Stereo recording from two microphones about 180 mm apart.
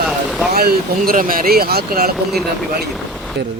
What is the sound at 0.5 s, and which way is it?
Speech, 55° right (ahead or behind).